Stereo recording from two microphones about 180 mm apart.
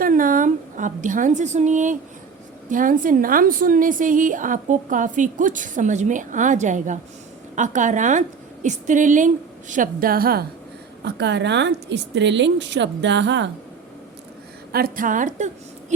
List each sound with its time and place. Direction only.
0.0 s a woman's voice: 50° right (ahead or behind)
11.0 s a woman's voice: 70° right (ahead or behind)
14.7 s a woman's voice: 55° right (ahead or behind)